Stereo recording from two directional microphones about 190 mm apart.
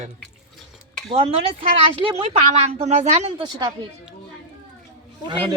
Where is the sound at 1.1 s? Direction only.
25° right (ahead or behind).